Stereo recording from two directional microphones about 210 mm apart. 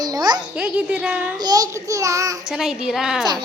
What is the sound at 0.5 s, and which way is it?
Speech, 5° right (ahead or behind).